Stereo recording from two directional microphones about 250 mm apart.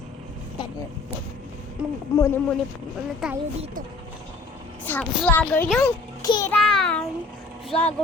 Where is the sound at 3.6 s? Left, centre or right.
Right.